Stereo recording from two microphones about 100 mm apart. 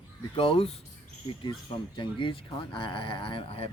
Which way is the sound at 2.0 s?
55° left (ahead or behind).